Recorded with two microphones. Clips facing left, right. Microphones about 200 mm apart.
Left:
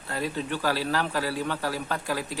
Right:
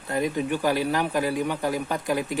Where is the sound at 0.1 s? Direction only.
15° right (ahead or behind).